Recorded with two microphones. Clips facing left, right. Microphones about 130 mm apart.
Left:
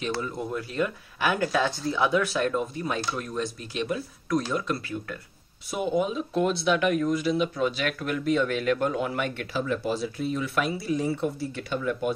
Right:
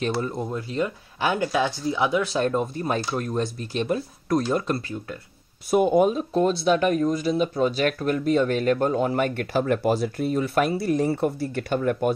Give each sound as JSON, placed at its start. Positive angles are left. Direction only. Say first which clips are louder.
{"t": 0.3, "sound": "speech", "louder": "right 3 dB", "side_deg": -25}
{"t": 2.3, "sound": "speech", "louder": "right 3 dB", "side_deg": -35}